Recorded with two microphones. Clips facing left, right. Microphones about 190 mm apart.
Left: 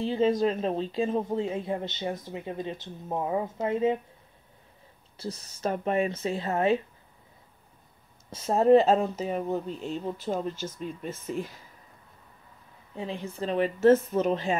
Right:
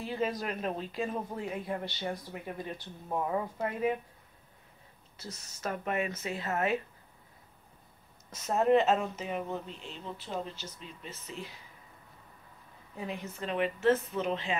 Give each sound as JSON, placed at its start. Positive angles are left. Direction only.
{"t": 0.0, "sound": "speech", "side_deg": 25}
{"t": 5.1, "sound": "speech", "side_deg": 30}
{"t": 8.3, "sound": "speech", "side_deg": 30}
{"t": 12.9, "sound": "speech", "side_deg": 30}